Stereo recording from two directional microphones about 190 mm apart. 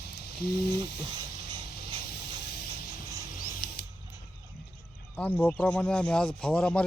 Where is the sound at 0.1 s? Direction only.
55° left (ahead or behind).